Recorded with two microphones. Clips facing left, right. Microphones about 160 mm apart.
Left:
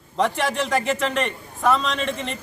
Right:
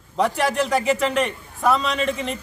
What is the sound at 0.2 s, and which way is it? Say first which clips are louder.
A man's voice: right 2 dB; 5° right (ahead or behind).